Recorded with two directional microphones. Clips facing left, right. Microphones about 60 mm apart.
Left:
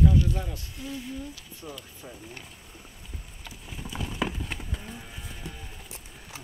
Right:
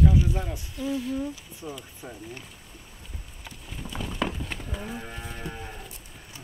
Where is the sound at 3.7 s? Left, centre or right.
Centre.